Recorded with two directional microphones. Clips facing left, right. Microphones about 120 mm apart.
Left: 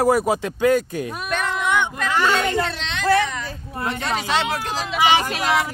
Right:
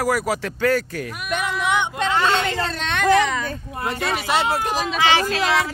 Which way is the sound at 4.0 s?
10° right (ahead or behind).